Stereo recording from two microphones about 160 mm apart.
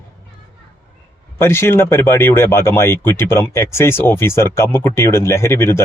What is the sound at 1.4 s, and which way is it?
Speech, 15° left (ahead or behind).